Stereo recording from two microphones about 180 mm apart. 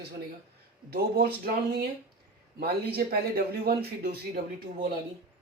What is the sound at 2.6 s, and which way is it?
Speech, 60° right (ahead or behind).